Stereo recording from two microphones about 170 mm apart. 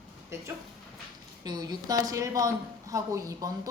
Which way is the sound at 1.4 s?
25° right (ahead or behind).